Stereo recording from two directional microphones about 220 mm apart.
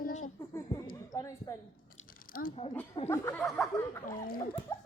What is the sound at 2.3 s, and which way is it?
Speech, 40° left (ahead or behind).